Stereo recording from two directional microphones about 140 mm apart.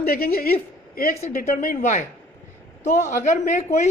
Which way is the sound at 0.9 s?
75° left (ahead or behind).